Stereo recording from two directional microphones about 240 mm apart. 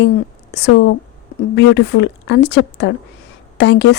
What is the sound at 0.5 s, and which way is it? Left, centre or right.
A woman's voice, left.